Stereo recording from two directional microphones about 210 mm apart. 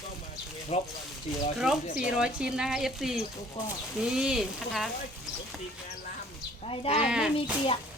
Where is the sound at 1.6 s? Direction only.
Centre (ahead or behind).